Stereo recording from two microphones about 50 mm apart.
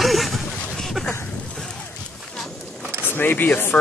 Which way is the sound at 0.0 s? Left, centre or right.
Centre.